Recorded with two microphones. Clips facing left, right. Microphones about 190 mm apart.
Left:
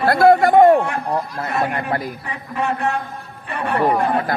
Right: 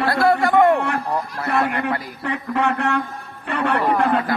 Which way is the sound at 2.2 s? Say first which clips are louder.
Right 3 dB; 65° right (ahead or behind).